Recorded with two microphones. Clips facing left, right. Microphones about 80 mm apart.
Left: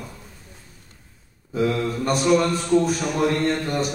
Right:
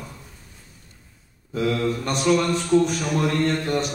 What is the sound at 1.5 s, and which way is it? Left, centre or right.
Speech, centre.